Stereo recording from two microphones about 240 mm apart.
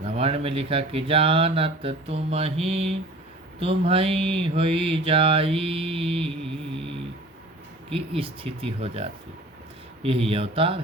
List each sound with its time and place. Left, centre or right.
0.0 s speech: right
7.9 s speech: right